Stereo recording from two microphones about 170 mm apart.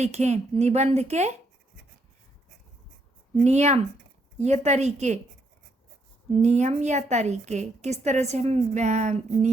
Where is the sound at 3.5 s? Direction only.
40° right (ahead or behind).